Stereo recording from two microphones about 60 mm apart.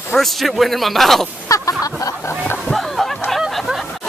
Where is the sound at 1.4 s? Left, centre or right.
Left.